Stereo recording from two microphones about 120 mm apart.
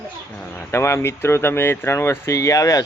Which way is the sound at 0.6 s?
20° left (ahead or behind).